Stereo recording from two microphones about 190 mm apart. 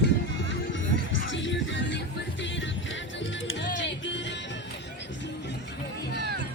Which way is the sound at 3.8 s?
70° left (ahead or behind).